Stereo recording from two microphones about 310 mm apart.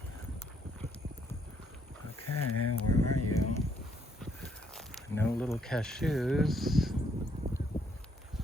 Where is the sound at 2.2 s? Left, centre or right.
Left.